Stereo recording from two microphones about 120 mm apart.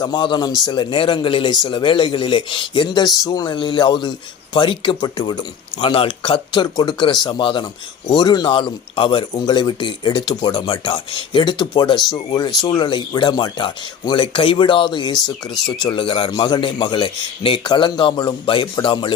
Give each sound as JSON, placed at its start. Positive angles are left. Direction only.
{"t": 0.0, "sound": "a man's voice", "side_deg": 40}
{"t": 9.3, "sound": "a man's voice", "side_deg": 35}